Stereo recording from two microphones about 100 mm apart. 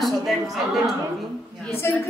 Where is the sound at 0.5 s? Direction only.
Centre (ahead or behind).